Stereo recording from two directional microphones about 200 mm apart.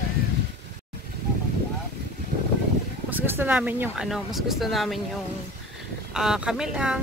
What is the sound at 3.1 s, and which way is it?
Speech, 10° right (ahead or behind).